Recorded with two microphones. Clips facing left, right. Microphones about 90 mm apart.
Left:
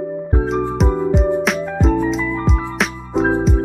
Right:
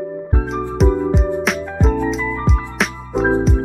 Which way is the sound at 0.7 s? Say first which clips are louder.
Right 1 dB; centre (ahead or behind).